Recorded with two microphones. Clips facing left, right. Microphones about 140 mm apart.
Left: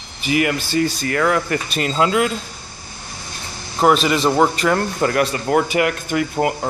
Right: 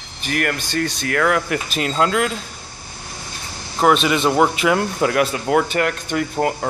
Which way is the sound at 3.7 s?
Centre (ahead or behind).